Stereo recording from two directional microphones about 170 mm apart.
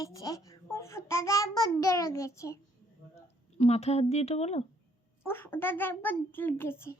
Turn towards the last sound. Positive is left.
turn(degrees=15)  # may be behind; listen again after turning